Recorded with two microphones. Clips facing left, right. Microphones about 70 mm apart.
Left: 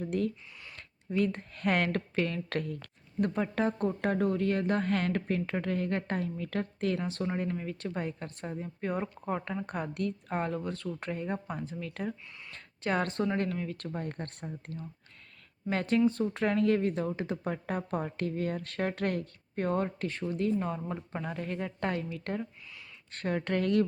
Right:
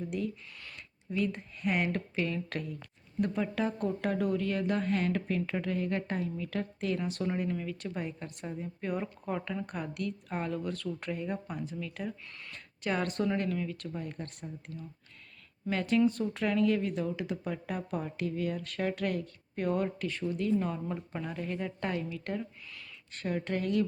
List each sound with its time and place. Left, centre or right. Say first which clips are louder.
0.0 s speech: left 3 dB; left
0.8 s a sound: left 3 dB; left
1.5 s speech: left 2 dB; left
15.7 s speech: even; left
21.2 s speech: even; left
23.1 s speech: left 2 dB; left